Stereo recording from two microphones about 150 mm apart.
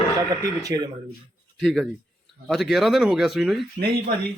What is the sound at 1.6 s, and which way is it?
Speech, centre (ahead or behind).